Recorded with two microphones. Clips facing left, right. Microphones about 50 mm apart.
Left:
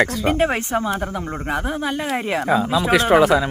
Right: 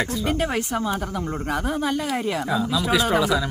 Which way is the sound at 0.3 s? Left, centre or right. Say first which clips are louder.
Left 4 dB; left.